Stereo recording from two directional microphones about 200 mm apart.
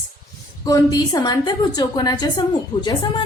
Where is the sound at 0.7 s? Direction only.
20° left (ahead or behind).